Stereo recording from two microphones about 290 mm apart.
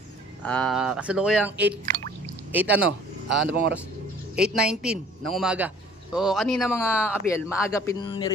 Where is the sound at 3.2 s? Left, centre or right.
Right.